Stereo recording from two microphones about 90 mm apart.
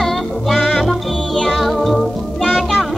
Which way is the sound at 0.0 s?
5° left (ahead or behind).